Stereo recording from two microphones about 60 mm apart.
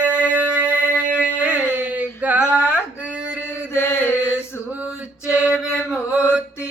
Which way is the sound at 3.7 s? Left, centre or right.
Left.